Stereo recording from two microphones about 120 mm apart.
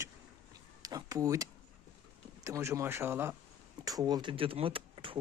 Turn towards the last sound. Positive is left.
turn(degrees=-45)  # may be behind; listen again after turning